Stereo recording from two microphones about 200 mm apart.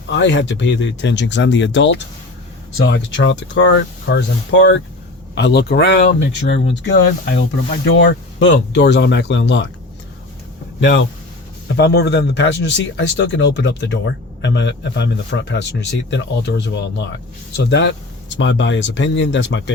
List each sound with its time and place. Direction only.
0.1 s speech: 65° left (ahead or behind)
10.8 s speech: 60° left (ahead or behind)